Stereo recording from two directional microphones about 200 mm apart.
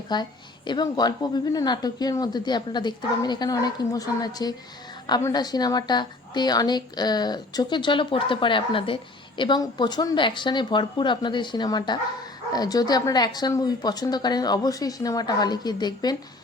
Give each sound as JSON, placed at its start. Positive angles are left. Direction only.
{"t": 0.1, "sound": "a woman's voice", "side_deg": 20}